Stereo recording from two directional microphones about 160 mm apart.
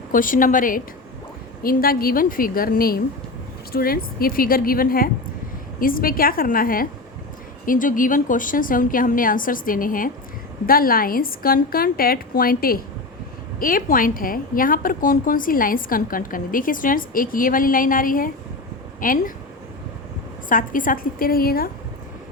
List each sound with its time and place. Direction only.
0.1 s a woman's voice: 60° left (ahead or behind)
20.5 s a woman's voice: 60° left (ahead or behind)